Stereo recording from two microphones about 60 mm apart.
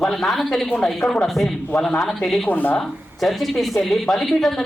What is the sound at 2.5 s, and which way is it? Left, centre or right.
Speech, left.